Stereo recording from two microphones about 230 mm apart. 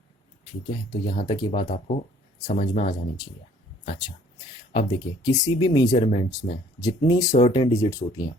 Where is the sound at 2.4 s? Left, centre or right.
Left.